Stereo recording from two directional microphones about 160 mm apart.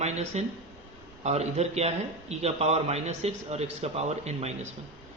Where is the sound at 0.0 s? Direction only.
45° right (ahead or behind).